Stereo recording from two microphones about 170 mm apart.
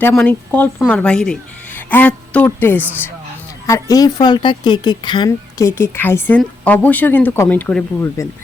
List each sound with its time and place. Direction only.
0.1 s a woman's voice: 5° left (ahead or behind)
8.2 s a woman's voice: 20° left (ahead or behind)